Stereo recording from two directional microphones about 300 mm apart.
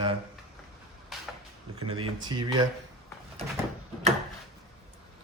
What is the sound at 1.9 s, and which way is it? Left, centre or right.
Speech, centre.